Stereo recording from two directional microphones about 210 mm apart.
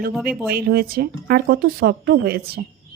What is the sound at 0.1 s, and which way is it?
Speech, centre (ahead or behind).